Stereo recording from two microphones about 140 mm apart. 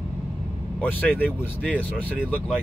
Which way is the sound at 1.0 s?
10° left (ahead or behind).